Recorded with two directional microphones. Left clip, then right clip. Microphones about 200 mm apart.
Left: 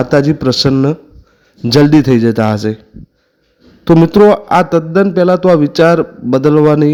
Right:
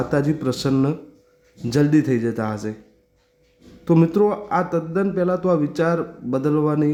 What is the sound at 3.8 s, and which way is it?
A man's voice, 35° left (ahead or behind).